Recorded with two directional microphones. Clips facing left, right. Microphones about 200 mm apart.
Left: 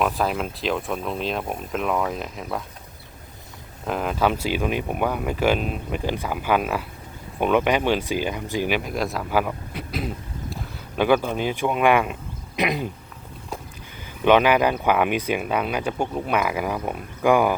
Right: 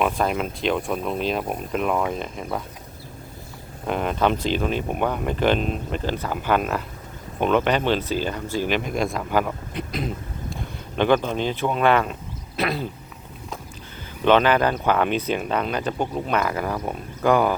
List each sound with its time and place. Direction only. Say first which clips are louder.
0.0 s speech: right 1 dB; centre (ahead or behind)
3.8 s speech: right 1 dB; centre (ahead or behind)
14.3 s speech: left 1 dB; 10° left (ahead or behind)